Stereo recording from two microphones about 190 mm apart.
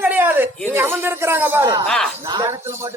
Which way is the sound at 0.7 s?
10° right (ahead or behind).